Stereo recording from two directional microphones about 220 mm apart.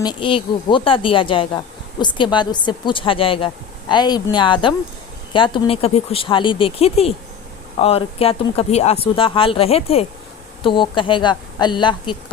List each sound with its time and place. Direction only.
0.0 s speech: 20° left (ahead or behind)